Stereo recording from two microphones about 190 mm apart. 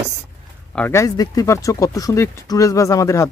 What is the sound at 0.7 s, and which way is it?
Speech, 10° left (ahead or behind).